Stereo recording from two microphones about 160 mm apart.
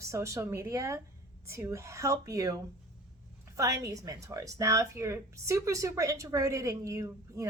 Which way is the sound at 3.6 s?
20° right (ahead or behind).